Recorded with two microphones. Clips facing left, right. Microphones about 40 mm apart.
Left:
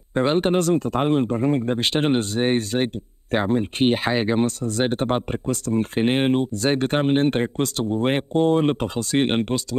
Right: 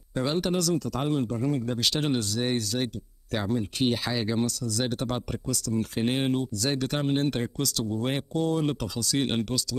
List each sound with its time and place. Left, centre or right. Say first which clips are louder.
0.1 s speech: left 8 dB; left